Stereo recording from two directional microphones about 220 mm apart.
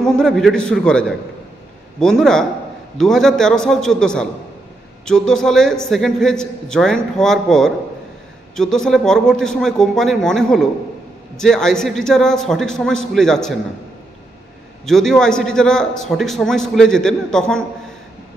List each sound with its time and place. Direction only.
0.0 s a man's voice: 5° left (ahead or behind)
14.9 s a man's voice: centre (ahead or behind)